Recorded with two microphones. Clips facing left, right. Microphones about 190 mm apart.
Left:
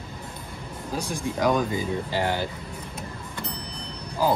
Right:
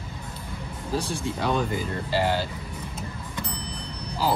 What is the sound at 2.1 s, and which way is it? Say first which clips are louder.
Speech: right 3 dB; 15° left (ahead or behind).